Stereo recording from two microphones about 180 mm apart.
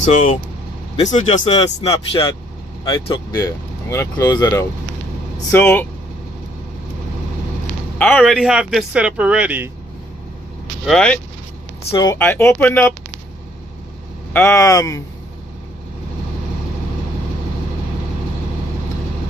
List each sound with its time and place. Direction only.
0.9 s speech: 40° left (ahead or behind)
2.8 s speech: 20° left (ahead or behind)
8.0 s speech: 5° left (ahead or behind)
10.9 s speech: 5° left (ahead or behind)
11.9 s speech: 20° left (ahead or behind)
14.3 s speech: 15° left (ahead or behind)